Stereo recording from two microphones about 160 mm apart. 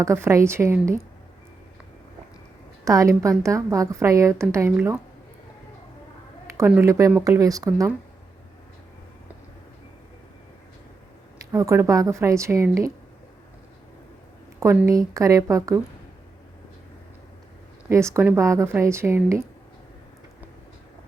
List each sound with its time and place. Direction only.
0.0 s speech: 15° right (ahead or behind)
2.8 s a woman's voice: 20° right (ahead or behind)
6.5 s a woman's voice: 15° right (ahead or behind)
11.5 s a woman's voice: 20° right (ahead or behind)
14.6 s a woman's voice: 20° right (ahead or behind)
17.8 s speech: 20° right (ahead or behind)